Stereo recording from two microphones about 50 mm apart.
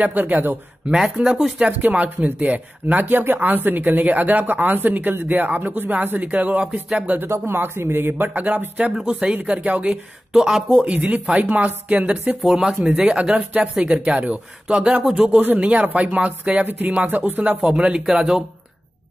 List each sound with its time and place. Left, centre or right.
0.0 s speech: right
0.8 s speech: centre
1.7 s speech: right
7.2 s speech: right
7.5 s speech: right
8.9 s speech: right
10.3 s speech: centre
10.9 s speech: right
12.4 s speech: centre
13.0 s speech: right
15.4 s speech: right
16.6 s speech: right; by 18.4 s centre